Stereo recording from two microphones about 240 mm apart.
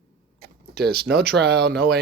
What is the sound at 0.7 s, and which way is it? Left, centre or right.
Speech, right.